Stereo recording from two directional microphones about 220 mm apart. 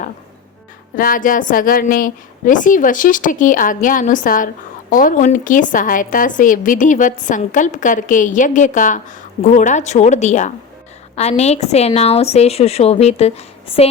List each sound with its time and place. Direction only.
0.9 s a woman's voice: 40° left (ahead or behind)